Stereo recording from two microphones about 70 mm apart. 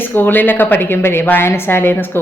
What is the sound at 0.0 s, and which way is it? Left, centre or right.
A woman's voice, left.